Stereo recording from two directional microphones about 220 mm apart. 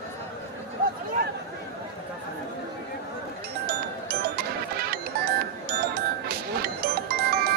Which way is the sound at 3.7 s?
45° right (ahead or behind).